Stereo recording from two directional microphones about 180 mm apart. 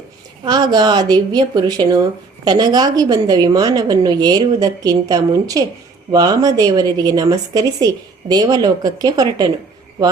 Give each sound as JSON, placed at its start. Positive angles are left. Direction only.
{"t": 0.4, "sound": "speech", "side_deg": -25}